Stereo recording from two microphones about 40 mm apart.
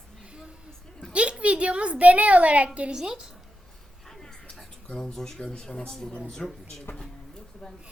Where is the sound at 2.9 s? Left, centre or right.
Centre.